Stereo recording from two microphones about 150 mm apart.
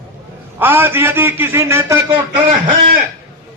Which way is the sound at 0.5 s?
15° right (ahead or behind).